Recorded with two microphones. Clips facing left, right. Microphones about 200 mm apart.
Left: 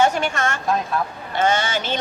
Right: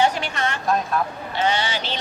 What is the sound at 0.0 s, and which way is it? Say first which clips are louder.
A woman's voice: left 2 dB; 45° left (ahead or behind).